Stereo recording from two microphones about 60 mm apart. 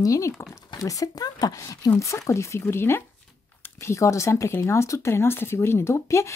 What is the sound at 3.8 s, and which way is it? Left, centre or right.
Speech, left.